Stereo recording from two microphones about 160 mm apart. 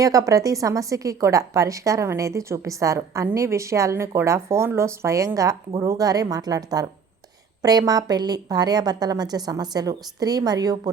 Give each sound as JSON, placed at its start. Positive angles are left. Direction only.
{"t": 0.0, "sound": "a woman's voice", "side_deg": -20}